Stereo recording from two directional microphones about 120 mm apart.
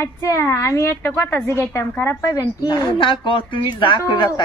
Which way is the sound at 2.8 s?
45° left (ahead or behind).